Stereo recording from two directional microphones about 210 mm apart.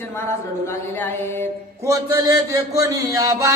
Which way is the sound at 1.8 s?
15° right (ahead or behind).